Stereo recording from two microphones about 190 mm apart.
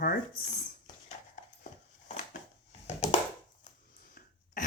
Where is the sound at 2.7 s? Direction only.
35° left (ahead or behind).